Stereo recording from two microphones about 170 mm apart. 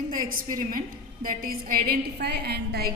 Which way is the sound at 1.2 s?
55° right (ahead or behind).